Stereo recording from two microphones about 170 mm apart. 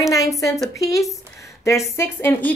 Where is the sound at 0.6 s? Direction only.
Centre (ahead or behind).